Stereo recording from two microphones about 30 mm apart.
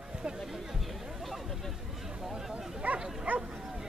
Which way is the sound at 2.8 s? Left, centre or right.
Right.